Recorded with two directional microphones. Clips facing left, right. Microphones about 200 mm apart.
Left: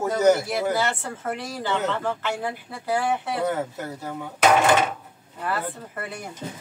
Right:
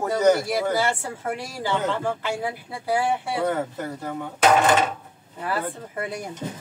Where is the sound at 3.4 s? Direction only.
5° left (ahead or behind).